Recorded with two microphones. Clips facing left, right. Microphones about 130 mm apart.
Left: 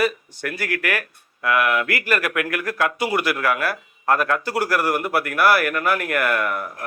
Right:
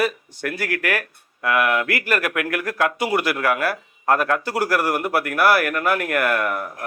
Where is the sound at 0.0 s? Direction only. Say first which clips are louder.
Even; 35° right (ahead or behind).